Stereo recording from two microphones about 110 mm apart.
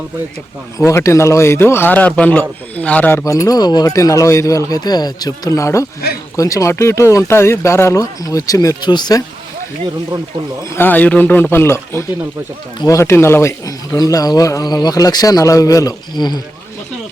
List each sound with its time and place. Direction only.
0.9 s speech: 25° left (ahead or behind)
3.2 s speech: 30° left (ahead or behind)
10.7 s speech: 20° left (ahead or behind); by 16.4 s 40° left (ahead or behind)